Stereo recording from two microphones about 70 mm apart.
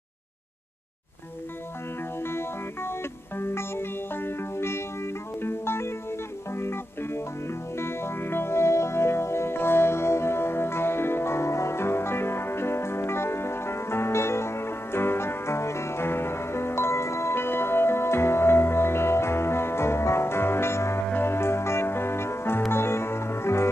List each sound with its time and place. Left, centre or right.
2.2 s music: left